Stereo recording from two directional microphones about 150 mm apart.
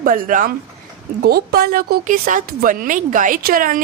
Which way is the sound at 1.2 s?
90° right.